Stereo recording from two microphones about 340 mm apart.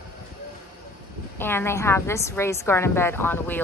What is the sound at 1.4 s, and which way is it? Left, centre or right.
A woman's voice, centre.